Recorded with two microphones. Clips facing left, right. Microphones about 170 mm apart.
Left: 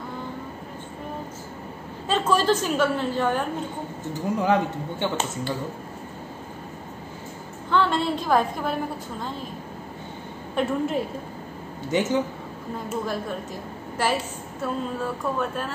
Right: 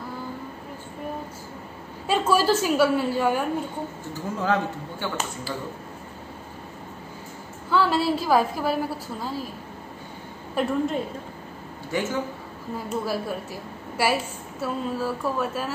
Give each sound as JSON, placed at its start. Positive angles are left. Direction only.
{"t": 2.0, "sound": "a woman's voice", "side_deg": -10}
{"t": 4.1, "sound": "speech", "side_deg": 15}
{"t": 7.7, "sound": "a woman's voice", "side_deg": -5}
{"t": 10.5, "sound": "a woman's voice", "side_deg": 0}
{"t": 11.9, "sound": "speech", "side_deg": 20}
{"t": 12.7, "sound": "a woman's voice", "side_deg": -5}